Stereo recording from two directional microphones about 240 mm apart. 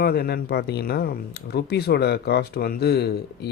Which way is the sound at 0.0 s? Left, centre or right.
Left.